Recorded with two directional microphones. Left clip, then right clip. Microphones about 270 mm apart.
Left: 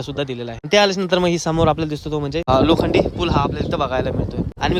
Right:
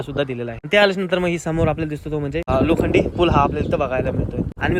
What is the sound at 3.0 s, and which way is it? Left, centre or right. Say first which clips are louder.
A man's voice: right 3 dB; centre.